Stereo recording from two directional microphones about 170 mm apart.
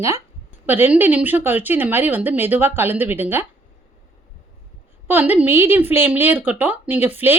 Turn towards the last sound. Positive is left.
turn(degrees=-10)  # may be behind; listen again after turning